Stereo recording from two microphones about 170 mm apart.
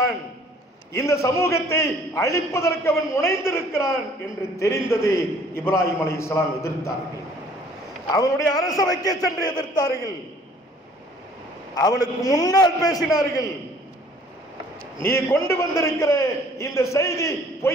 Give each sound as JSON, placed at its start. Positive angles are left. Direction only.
{"t": 0.9, "sound": "a man's voice", "side_deg": 15}
{"t": 8.1, "sound": "a man's voice", "side_deg": 20}
{"t": 11.7, "sound": "a man's voice", "side_deg": 20}
{"t": 15.0, "sound": "a man's voice", "side_deg": 15}